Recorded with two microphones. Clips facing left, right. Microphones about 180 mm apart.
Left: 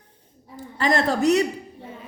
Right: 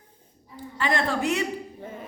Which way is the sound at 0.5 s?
40° left (ahead or behind).